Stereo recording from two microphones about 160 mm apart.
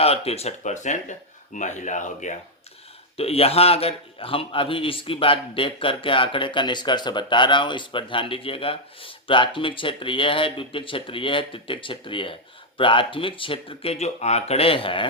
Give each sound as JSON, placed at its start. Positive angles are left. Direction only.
{"t": 0.0, "sound": "speech", "side_deg": 40}
{"t": 3.2, "sound": "a man's voice", "side_deg": 40}